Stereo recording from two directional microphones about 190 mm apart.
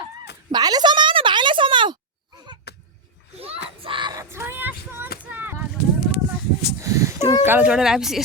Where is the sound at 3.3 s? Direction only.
30° right (ahead or behind); by 5.6 s 10° right (ahead or behind).